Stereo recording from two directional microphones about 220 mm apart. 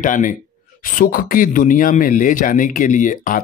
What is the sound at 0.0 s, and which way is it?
Speech, 35° left (ahead or behind).